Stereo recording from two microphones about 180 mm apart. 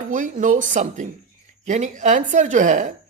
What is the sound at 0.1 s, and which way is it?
A woman's voice, 45° right (ahead or behind).